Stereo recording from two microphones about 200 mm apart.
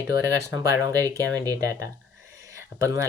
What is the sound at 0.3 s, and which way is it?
Speech, 15° right (ahead or behind).